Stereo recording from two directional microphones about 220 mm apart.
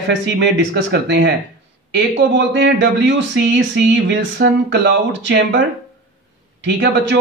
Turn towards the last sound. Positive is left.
turn(degrees=-55)  # may be behind; listen again after turning